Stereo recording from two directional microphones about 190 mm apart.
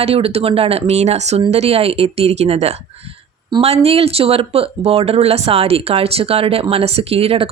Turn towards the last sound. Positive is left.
turn(degrees=-30)  # may be behind; listen again after turning